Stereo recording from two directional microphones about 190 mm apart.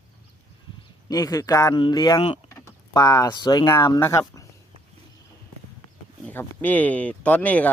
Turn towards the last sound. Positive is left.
turn(degrees=10)  # may be behind; listen again after turning